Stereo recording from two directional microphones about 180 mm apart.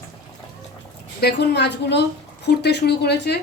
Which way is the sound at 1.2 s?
65° left (ahead or behind).